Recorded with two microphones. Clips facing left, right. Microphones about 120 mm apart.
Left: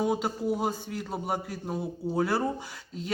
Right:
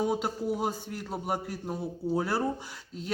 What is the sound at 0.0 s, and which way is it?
A man's voice, centre (ahead or behind).